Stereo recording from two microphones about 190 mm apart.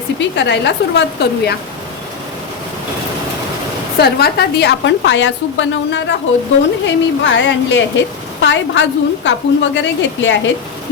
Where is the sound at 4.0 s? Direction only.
55° left (ahead or behind).